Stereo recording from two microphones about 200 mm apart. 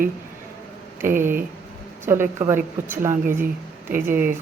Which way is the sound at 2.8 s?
10° right (ahead or behind).